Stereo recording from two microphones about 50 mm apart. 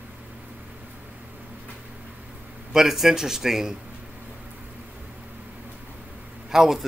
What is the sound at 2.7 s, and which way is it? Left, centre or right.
Speech, centre.